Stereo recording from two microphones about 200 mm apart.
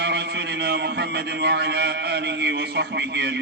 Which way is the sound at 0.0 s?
60° right (ahead or behind).